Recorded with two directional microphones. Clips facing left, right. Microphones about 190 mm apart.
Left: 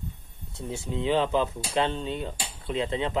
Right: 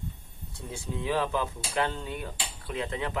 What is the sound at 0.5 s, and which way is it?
Speech, 25° left (ahead or behind).